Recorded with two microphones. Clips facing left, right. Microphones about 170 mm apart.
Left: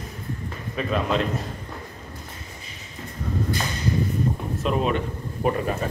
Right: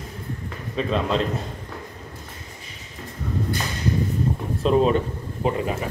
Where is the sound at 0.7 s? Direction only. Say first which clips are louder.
Right 1 dB; 25° right (ahead or behind).